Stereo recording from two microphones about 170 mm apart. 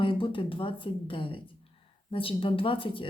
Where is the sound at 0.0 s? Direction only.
30° left (ahead or behind).